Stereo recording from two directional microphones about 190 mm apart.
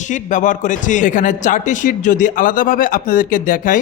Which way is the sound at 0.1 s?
40° left (ahead or behind).